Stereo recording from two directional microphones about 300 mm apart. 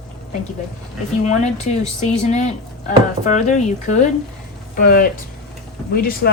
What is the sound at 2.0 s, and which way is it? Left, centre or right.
Speech, left.